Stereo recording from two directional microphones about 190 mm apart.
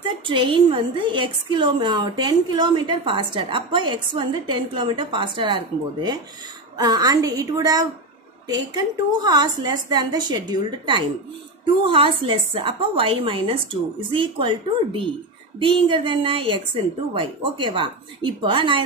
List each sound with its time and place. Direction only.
0.2 s a woman's voice: 25° right (ahead or behind)
6.8 s a woman's voice: 20° right (ahead or behind)